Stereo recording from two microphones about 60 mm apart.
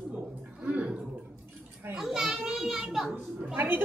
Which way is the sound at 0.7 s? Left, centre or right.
Right.